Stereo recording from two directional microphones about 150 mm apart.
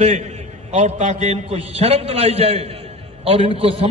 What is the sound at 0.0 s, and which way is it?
A man's voice, 50° right (ahead or behind).